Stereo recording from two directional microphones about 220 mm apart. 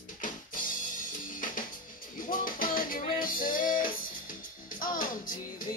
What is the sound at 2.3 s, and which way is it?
Music, 40° left (ahead or behind).